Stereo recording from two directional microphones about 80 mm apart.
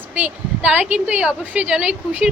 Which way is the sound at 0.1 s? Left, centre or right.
Centre.